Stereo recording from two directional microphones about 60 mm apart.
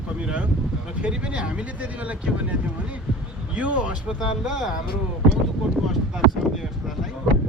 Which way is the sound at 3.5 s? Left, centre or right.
Right.